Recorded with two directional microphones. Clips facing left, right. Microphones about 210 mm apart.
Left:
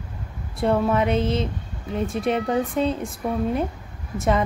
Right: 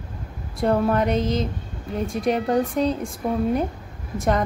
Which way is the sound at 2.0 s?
5° left (ahead or behind).